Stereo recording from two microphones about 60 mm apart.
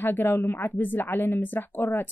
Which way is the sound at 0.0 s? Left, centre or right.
Left.